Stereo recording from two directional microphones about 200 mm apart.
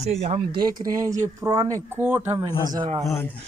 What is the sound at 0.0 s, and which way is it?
Speech, 30° right (ahead or behind).